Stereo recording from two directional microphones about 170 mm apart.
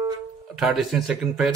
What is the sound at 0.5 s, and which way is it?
Speech, centre (ahead or behind).